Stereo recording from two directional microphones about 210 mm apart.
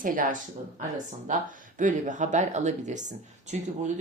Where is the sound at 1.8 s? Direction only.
35° right (ahead or behind).